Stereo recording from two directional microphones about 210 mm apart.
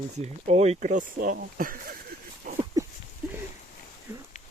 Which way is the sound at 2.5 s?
35° right (ahead or behind).